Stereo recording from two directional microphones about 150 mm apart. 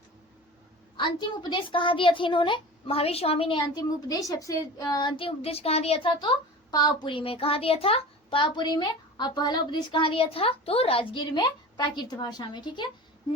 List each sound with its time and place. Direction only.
0.9 s a woman's voice: 30° left (ahead or behind)